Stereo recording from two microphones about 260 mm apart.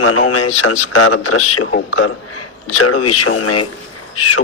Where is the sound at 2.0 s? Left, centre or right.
Left.